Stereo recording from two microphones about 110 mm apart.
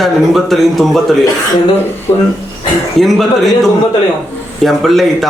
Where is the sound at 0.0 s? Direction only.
Centre (ahead or behind).